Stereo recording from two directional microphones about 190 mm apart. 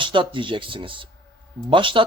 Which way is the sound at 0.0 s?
25° right (ahead or behind).